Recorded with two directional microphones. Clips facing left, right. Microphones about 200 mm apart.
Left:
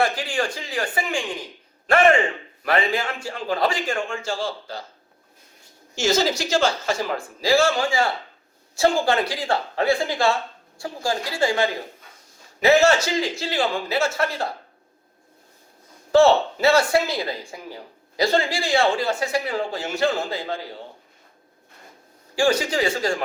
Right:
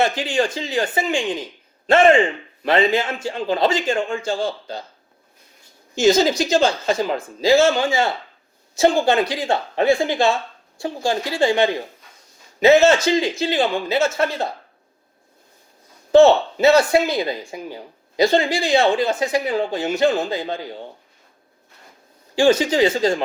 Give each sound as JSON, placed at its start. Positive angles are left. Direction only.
{"t": 0.0, "sound": "speech", "side_deg": -25}
{"t": 5.9, "sound": "speech", "side_deg": -20}
{"t": 16.1, "sound": "speech", "side_deg": -20}
{"t": 22.4, "sound": "speech", "side_deg": -20}